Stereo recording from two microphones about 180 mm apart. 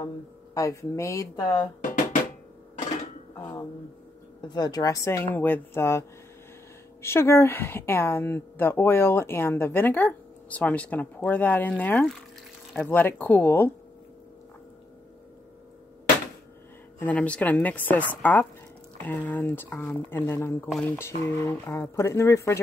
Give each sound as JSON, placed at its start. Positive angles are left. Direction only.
{"t": 0.6, "sound": "speech", "side_deg": 15}
{"t": 3.3, "sound": "a woman's voice", "side_deg": 20}
{"t": 17.0, "sound": "a woman's voice", "side_deg": 10}
{"t": 20.6, "sound": "speech", "side_deg": 0}
{"t": 21.3, "sound": "a woman's voice", "side_deg": 15}